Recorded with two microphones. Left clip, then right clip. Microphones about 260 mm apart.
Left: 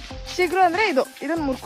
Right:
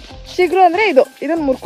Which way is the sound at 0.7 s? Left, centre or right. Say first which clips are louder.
Right 8 dB; right.